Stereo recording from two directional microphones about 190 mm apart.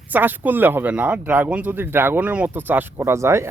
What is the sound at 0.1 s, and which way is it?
Speech, 10° right (ahead or behind).